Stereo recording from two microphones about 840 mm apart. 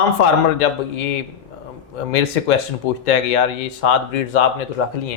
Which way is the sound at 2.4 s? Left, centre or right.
Left.